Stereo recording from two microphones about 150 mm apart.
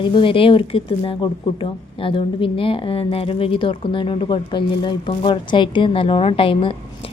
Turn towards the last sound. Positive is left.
turn(degrees=35)  # may be behind; listen again after turning